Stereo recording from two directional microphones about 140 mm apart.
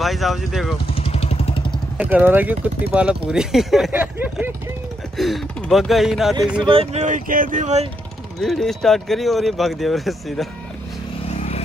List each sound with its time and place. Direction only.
0.0 s speech: centre (ahead or behind)
0.9 s vehicle: 45° left (ahead or behind)
2.0 s speech: 10° right (ahead or behind)
5.1 s speech: centre (ahead or behind)
6.6 s speech: 40° right (ahead or behind)
8.4 s speech: 5° left (ahead or behind)
11.3 s vehicle: 50° left (ahead or behind)